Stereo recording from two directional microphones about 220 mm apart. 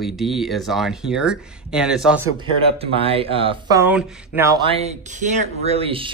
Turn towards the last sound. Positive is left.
turn(degrees=-25)  # may be behind; listen again after turning